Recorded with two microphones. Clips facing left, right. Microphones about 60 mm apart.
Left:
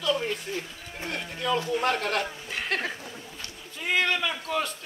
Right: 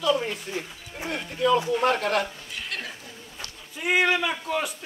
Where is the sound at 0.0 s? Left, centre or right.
Centre.